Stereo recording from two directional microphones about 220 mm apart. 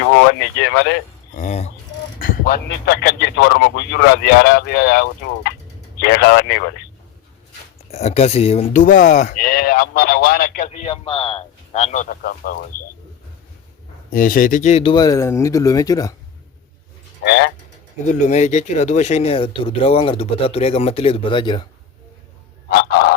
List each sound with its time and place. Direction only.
0.2 s speech: 50° left (ahead or behind)
1.4 s a man's voice: 30° left (ahead or behind); by 6.7 s 50° left (ahead or behind)
7.9 s speech: 30° left (ahead or behind)
14.1 s speech: 40° left (ahead or behind); by 16.1 s 15° left (ahead or behind)
17.2 s a man's voice: 50° left (ahead or behind)
18.0 s speech: 35° left (ahead or behind)